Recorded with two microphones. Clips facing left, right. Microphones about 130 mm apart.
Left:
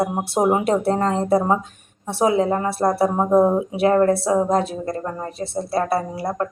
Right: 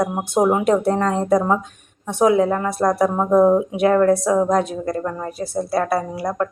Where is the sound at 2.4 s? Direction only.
5° left (ahead or behind).